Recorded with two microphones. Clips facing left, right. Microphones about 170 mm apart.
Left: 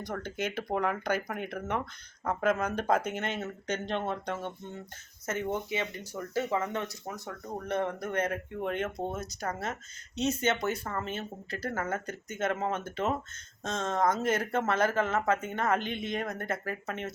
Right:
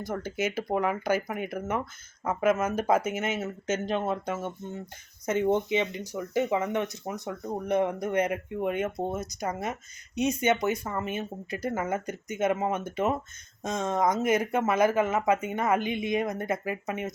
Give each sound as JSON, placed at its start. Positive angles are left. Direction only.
{"t": 0.0, "sound": "speech", "side_deg": -5}
{"t": 5.2, "sound": "speech", "side_deg": -15}